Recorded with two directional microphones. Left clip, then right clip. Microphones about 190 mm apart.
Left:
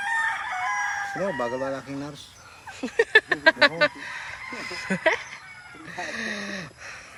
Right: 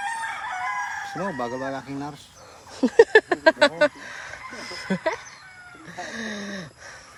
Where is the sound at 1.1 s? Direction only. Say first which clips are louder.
Left 2 dB; 55° right (ahead or behind).